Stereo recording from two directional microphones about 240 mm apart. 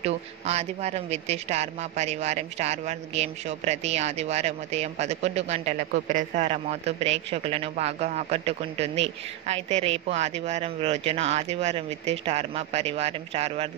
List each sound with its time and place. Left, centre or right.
0.0 s speech: right